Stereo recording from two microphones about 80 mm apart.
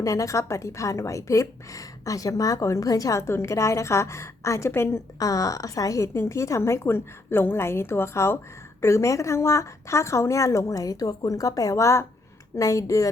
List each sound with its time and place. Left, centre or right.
0.0 s a woman's voice: left
5.2 s a woman's voice: left